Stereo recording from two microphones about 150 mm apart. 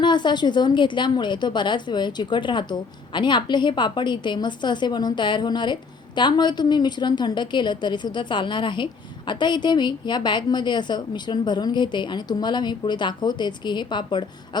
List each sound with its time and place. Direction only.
0.0 s a woman's voice: 30° left (ahead or behind)